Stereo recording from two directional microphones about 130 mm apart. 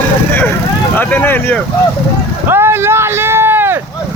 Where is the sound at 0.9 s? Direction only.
15° left (ahead or behind).